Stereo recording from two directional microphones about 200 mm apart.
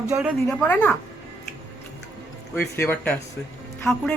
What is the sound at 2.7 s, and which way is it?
A woman's voice, 10° left (ahead or behind).